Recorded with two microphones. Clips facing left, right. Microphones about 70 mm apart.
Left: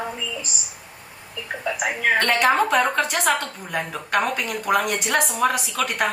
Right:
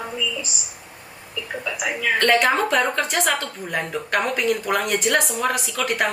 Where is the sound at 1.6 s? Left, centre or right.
Left.